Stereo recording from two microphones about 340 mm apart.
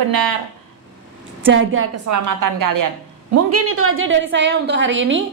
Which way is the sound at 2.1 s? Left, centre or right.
Right.